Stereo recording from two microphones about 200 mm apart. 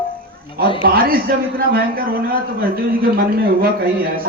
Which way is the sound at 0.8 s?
45° right (ahead or behind).